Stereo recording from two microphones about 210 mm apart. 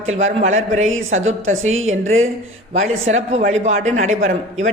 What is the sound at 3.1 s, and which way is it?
Speech, 30° right (ahead or behind).